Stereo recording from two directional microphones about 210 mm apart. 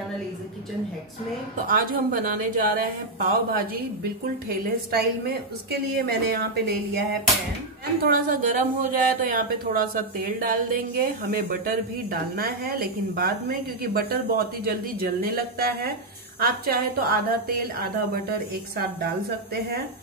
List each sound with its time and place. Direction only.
1.7 s a woman's voice: 40° right (ahead or behind)